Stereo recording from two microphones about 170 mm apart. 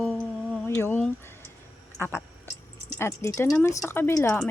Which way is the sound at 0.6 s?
15° left (ahead or behind).